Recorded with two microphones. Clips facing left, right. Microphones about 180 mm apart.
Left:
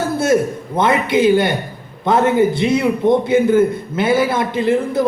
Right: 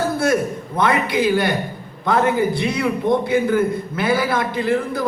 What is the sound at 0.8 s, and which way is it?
A man's voice, 25° left (ahead or behind).